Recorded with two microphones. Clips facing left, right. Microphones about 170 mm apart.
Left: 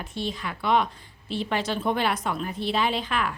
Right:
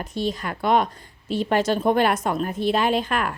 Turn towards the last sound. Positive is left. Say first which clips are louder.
# right 4 dB
turn(degrees=-50)  # may be behind; listen again after turning